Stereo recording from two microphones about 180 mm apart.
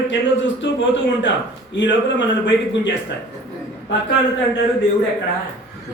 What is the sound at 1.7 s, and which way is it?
A man's voice, 90° left.